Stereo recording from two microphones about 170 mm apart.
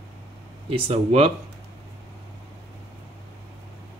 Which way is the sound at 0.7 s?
35° right (ahead or behind).